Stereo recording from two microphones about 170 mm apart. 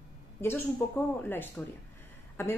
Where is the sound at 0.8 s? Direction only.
10° left (ahead or behind).